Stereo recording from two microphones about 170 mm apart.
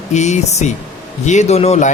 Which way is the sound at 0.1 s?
40° left (ahead or behind).